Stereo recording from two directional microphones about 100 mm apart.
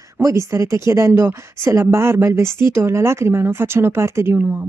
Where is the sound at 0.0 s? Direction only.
30° right (ahead or behind).